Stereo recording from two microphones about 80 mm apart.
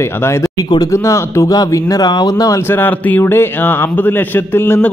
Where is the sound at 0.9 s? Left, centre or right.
Left.